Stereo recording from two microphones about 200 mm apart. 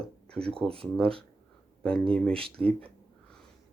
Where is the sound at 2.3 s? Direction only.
25° right (ahead or behind).